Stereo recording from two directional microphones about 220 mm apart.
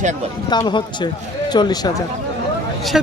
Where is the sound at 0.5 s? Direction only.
20° left (ahead or behind).